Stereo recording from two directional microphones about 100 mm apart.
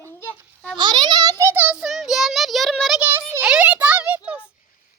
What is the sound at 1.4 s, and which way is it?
Speech, 20° right (ahead or behind).